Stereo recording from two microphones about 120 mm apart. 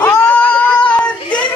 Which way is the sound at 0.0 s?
10° left (ahead or behind).